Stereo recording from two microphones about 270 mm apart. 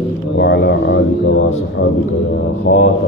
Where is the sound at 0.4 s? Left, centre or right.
Left.